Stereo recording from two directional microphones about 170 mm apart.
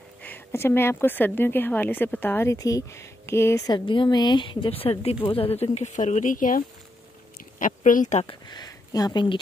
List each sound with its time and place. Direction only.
0.2 s speech: 10° left (ahead or behind); by 8.3 s 45° left (ahead or behind)
8.3 s speech: 25° left (ahead or behind)